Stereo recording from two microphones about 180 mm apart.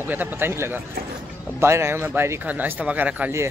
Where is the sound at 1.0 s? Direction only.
55° right (ahead or behind).